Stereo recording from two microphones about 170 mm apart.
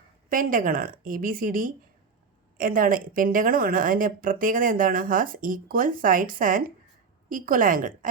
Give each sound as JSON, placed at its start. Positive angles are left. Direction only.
{"t": 0.3, "sound": "speech", "side_deg": -55}